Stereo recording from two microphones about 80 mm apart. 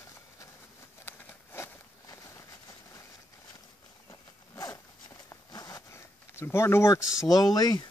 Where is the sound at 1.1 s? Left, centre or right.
Left.